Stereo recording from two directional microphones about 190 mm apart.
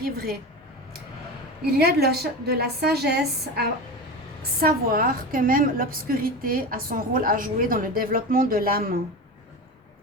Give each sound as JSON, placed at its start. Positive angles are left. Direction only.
{"t": 1.8, "sound": "a woman's voice", "side_deg": -55}